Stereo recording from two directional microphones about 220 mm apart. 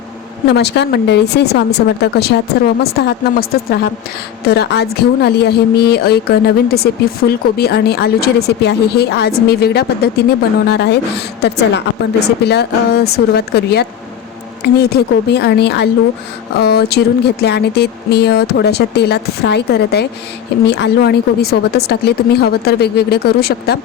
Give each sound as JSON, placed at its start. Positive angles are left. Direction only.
{"t": 0.4, "sound": "a woman's voice", "side_deg": 50}